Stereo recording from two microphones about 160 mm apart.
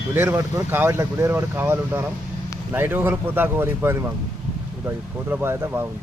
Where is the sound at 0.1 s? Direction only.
15° right (ahead or behind).